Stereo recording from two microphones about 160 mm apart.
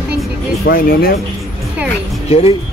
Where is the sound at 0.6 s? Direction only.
70° left (ahead or behind).